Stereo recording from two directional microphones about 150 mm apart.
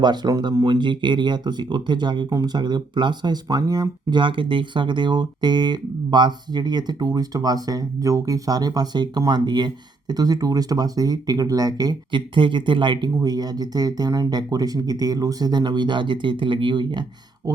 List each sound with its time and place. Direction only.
0.0 s speech: 30° right (ahead or behind)